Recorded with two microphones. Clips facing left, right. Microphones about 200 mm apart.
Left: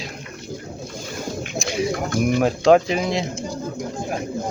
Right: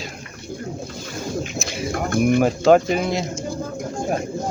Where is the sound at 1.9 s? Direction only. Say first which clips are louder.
Right 7 dB; 55° right (ahead or behind).